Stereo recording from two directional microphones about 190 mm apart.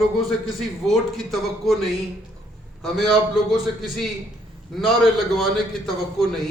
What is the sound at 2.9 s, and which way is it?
A man's voice, centre (ahead or behind).